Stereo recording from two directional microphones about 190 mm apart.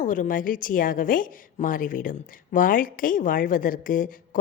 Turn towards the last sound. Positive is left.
turn(degrees=45)  # may be behind; listen again after turning